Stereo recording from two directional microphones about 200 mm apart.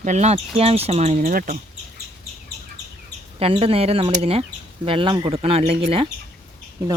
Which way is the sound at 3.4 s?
30° right (ahead or behind).